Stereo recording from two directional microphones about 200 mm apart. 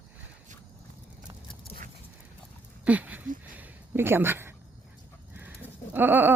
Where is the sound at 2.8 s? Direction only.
5° right (ahead or behind).